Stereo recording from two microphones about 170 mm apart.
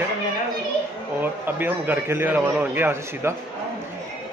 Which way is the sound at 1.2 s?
10° right (ahead or behind).